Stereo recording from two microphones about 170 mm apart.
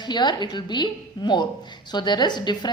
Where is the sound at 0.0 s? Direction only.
25° left (ahead or behind).